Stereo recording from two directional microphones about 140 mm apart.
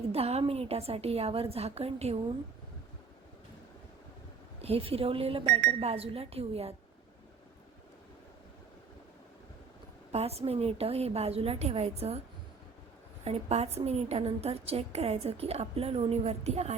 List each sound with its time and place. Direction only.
0.1 s a woman's voice: 45° right (ahead or behind)
4.6 s a woman's voice: 45° right (ahead or behind)
10.1 s a woman's voice: 45° right (ahead or behind)
13.2 s a woman's voice: 50° right (ahead or behind)